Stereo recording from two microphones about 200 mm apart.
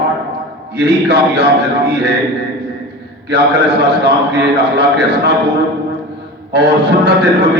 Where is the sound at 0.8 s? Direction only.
55° right (ahead or behind).